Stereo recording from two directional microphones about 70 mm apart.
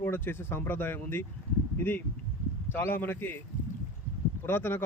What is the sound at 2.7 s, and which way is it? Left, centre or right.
Speech, left.